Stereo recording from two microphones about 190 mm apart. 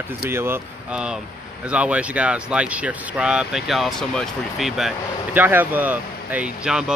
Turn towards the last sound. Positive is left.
turn(degrees=-5)  # may be behind; listen again after turning